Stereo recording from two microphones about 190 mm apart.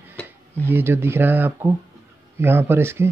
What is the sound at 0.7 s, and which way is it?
Speech, 10° right (ahead or behind).